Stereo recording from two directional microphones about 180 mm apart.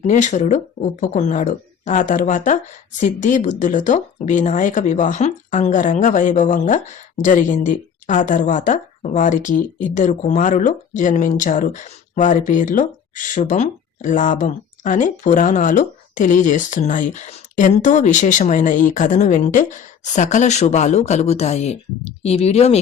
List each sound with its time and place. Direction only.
0.0 s speech: 40° left (ahead or behind)